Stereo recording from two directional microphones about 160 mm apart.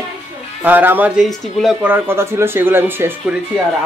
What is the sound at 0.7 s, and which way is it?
Speech, 10° right (ahead or behind).